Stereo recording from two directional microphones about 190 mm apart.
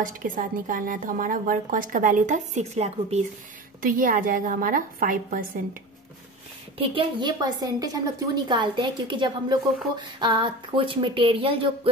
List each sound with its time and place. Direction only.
0.0 s a woman's voice: 45° right (ahead or behind)
3.8 s a woman's voice: 45° right (ahead or behind)
6.8 s speech: 25° right (ahead or behind)